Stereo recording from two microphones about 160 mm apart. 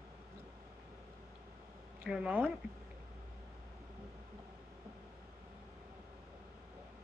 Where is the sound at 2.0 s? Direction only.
10° right (ahead or behind).